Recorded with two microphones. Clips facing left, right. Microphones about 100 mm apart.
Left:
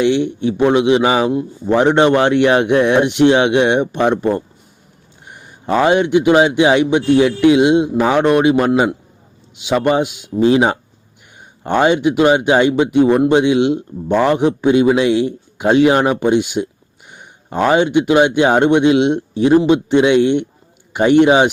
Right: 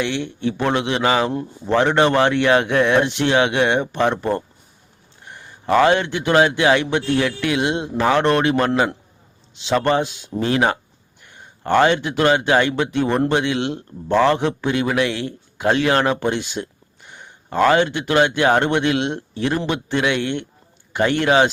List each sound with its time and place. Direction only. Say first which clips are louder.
0.0 s a man's voice: left 8 dB; 20° left (ahead or behind)